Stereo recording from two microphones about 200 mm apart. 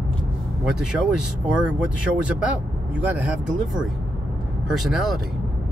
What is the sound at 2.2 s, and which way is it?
Speech, 5° right (ahead or behind).